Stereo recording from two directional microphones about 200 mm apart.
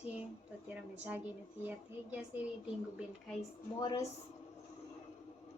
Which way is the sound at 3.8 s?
20° left (ahead or behind).